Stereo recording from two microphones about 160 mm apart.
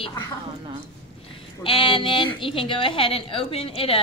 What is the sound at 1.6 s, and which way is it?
A woman's voice, 35° left (ahead or behind).